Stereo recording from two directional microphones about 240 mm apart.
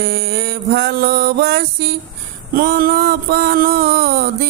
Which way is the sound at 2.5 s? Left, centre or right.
Right.